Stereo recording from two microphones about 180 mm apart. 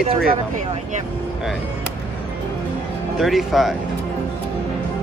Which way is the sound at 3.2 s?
Centre (ahead or behind).